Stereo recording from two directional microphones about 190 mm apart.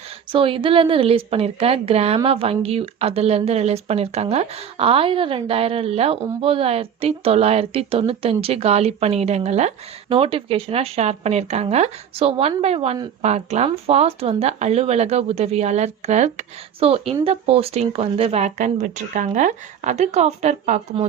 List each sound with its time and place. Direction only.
0.3 s a woman's voice: 25° right (ahead or behind)